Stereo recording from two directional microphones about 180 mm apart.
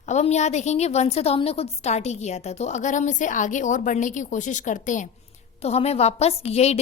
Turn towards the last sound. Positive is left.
turn(degrees=35)  # may be behind; listen again after turning